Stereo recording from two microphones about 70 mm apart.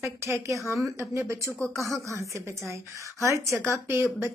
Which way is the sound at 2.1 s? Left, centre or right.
Right.